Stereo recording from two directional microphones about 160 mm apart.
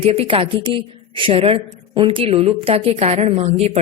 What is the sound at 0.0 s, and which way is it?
A woman's voice, 35° right (ahead or behind).